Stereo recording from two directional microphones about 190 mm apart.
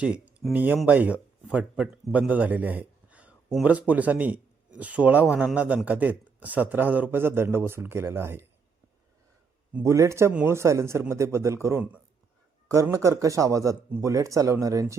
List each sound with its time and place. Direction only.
0.0 s a man's voice: 5° right (ahead or behind)
9.7 s a man's voice: 15° right (ahead or behind)